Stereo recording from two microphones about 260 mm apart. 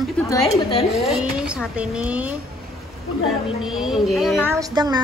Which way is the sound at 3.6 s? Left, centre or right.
Centre.